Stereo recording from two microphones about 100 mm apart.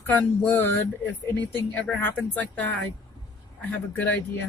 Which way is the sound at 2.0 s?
15° left (ahead or behind).